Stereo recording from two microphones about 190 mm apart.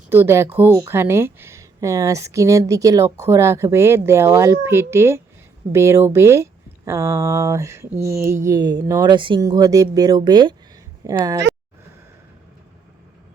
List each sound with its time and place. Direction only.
0.1 s speech: 10° right (ahead or behind)